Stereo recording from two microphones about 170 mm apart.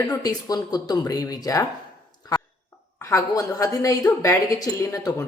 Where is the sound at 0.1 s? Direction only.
20° left (ahead or behind).